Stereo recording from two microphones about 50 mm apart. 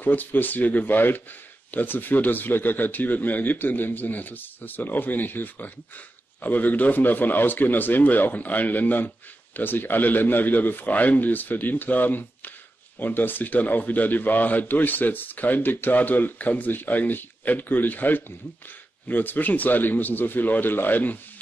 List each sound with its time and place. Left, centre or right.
0.0 s speech: left